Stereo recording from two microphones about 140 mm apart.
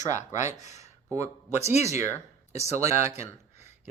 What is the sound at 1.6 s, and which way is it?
Speech, 50° left (ahead or behind).